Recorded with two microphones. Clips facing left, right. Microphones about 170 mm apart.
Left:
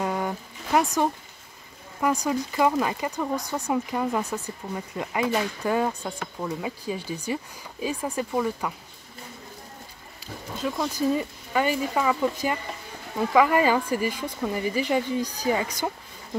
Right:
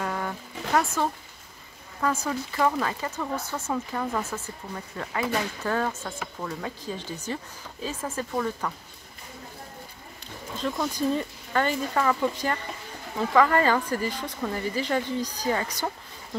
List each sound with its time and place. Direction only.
0.0 s a sound: 15° left (ahead or behind)
2.0 s speech: 15° left (ahead or behind)
10.2 s speech: 5° left (ahead or behind)